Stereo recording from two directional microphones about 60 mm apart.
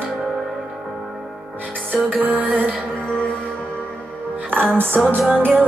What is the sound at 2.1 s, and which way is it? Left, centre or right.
Music, right.